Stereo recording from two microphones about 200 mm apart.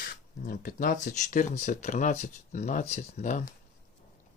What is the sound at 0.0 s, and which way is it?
Speech, 45° left (ahead or behind).